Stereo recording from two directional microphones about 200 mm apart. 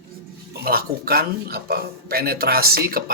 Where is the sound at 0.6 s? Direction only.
50° right (ahead or behind).